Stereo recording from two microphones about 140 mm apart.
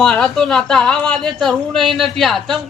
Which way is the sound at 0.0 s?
5° left (ahead or behind).